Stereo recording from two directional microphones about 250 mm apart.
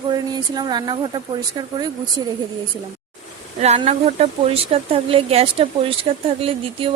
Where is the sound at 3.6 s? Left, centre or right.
Right.